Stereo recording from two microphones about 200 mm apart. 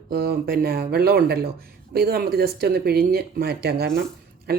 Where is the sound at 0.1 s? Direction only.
50° right (ahead or behind).